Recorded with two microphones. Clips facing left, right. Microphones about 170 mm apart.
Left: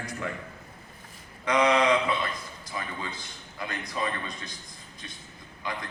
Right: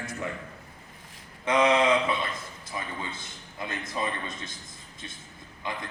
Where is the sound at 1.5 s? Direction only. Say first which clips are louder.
Even; 25° right (ahead or behind).